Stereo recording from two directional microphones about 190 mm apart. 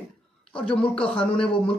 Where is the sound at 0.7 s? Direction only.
5° left (ahead or behind).